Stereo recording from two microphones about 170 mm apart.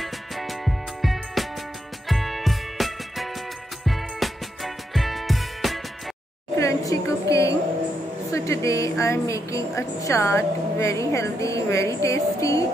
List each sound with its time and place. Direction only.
0.0 s music: centre (ahead or behind)
6.6 s a sound: 20° left (ahead or behind)
8.3 s a woman's voice: 20° left (ahead or behind)